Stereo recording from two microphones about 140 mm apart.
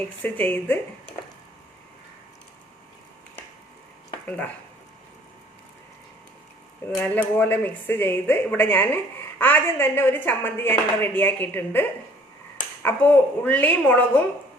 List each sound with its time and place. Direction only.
0.0 s speech: 10° left (ahead or behind)
4.3 s speech: 10° left (ahead or behind)
7.0 s speech: 10° left (ahead or behind)